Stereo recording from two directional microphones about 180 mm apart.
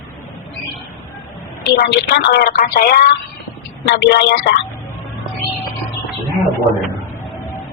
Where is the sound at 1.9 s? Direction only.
65° left (ahead or behind).